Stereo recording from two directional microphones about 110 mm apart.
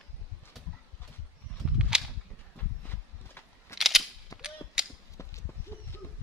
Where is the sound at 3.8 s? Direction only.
Centre (ahead or behind).